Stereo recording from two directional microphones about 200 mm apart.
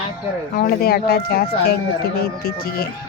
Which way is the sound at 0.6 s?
50° left (ahead or behind).